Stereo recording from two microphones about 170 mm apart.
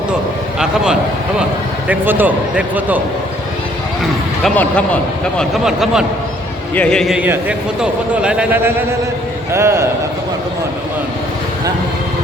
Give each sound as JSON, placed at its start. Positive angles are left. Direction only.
{"t": 1.9, "sound": "a man's voice", "side_deg": -10}
{"t": 4.4, "sound": "a man's voice", "side_deg": 10}
{"t": 5.4, "sound": "a man's voice", "side_deg": 0}